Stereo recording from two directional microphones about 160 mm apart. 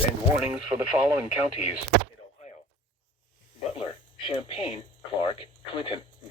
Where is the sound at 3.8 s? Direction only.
30° left (ahead or behind).